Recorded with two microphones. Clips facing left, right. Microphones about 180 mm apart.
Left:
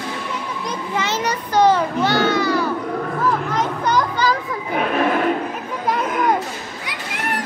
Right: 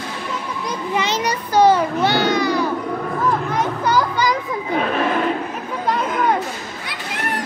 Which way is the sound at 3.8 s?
10° right (ahead or behind).